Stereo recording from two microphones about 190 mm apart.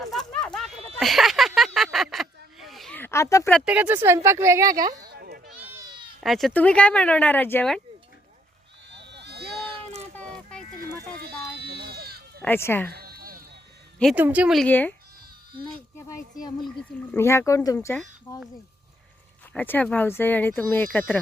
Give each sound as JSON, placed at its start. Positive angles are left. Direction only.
{"t": 0.0, "sound": "a sound", "side_deg": 0}
{"t": 3.5, "sound": "speech", "side_deg": -5}
{"t": 4.9, "sound": "children playing", "side_deg": -55}
{"t": 5.5, "sound": "goat", "side_deg": -15}
{"t": 6.1, "sound": "speech", "side_deg": 0}
{"t": 8.9, "sound": "a sound", "side_deg": -65}
{"t": 11.2, "sound": "a sound", "side_deg": -60}
{"t": 12.4, "sound": "speech", "side_deg": 10}
{"t": 12.9, "sound": "sheep", "side_deg": -55}
{"t": 14.0, "sound": "speech", "side_deg": 0}
{"t": 14.7, "sound": "speech", "side_deg": 10}
{"t": 16.0, "sound": "a sound", "side_deg": 15}
{"t": 17.2, "sound": "speech", "side_deg": 15}
{"t": 19.5, "sound": "speech", "side_deg": 10}